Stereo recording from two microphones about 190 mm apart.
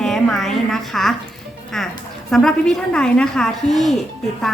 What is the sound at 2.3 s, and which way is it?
A woman's voice, centre (ahead or behind).